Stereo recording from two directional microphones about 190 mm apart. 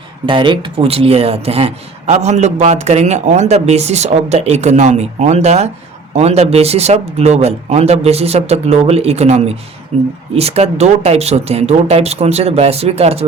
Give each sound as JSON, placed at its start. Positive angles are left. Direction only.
{"t": 0.3, "sound": "speech", "side_deg": -25}